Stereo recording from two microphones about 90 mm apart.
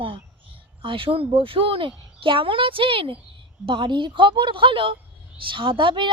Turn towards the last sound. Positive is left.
turn(degrees=-65)  # may be behind; listen again after turning